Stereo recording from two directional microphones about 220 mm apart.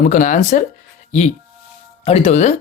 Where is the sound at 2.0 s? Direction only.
30° left (ahead or behind).